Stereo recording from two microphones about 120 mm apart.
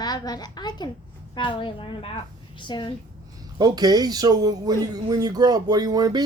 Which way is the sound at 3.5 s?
35° right (ahead or behind).